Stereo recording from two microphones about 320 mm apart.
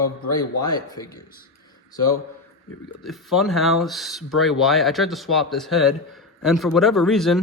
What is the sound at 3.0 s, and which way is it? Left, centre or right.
Speech, centre.